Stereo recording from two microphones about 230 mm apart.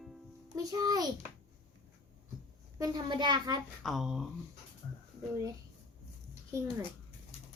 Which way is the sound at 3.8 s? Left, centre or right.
Centre.